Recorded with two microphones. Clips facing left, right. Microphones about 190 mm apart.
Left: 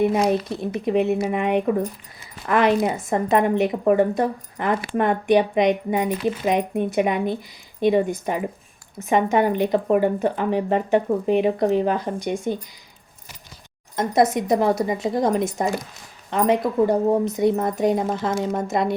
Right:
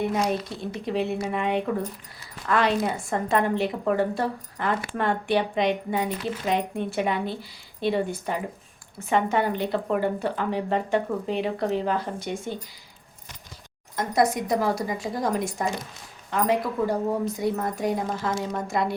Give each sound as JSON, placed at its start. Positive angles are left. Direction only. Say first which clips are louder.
{"t": 0.1, "sound": "a woman's voice", "louder": "left 5 dB", "side_deg": 20}
{"t": 13.9, "sound": "speech", "louder": "left 4 dB", "side_deg": 20}